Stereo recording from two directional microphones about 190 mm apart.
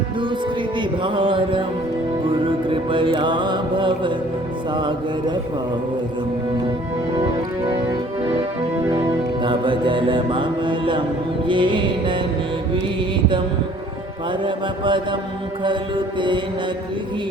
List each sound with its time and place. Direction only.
0.8 s music: 25° right (ahead or behind)
9.0 s music: 25° right (ahead or behind)
14.4 s music: 25° right (ahead or behind)